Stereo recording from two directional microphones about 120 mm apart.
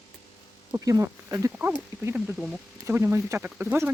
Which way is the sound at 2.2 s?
10° right (ahead or behind).